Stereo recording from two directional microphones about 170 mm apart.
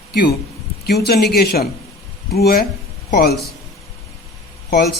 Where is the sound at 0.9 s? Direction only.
70° left (ahead or behind).